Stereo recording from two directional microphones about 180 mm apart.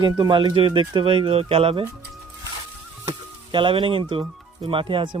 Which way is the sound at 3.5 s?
30° right (ahead or behind).